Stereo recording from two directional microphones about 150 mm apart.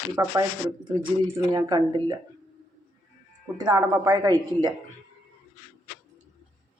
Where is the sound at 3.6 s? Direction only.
25° right (ahead or behind).